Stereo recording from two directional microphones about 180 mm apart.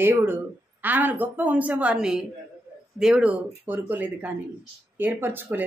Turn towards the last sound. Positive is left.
turn(degrees=-10)  # may be behind; listen again after turning